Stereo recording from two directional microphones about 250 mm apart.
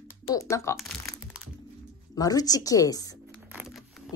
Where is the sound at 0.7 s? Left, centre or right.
Centre.